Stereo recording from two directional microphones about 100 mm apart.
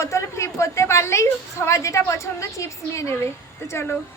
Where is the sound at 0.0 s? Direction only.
30° left (ahead or behind).